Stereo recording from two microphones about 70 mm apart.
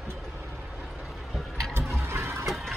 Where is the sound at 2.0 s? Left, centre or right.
Right.